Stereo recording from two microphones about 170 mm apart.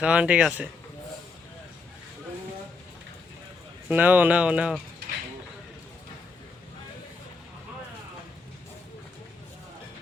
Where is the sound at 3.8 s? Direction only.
10° right (ahead or behind).